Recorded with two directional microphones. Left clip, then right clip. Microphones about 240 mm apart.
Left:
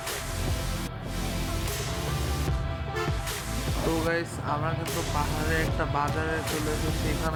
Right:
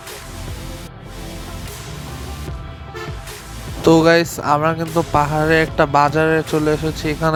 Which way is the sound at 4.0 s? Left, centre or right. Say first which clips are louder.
Right 15 dB; right.